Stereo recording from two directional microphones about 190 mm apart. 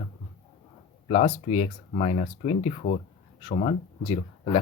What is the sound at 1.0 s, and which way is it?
Speech, 30° left (ahead or behind).